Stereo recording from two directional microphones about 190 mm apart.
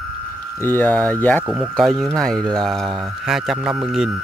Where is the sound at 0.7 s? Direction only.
10° left (ahead or behind).